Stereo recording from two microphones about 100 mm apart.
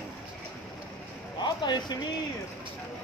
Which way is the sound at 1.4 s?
50° left (ahead or behind).